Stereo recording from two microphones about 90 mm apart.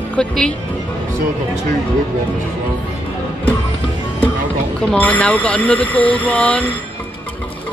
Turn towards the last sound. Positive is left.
turn(degrees=15)  # may be behind; listen again after turning